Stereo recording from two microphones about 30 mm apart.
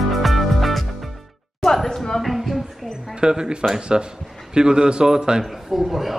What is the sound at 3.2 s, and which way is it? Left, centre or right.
A man's voice, right.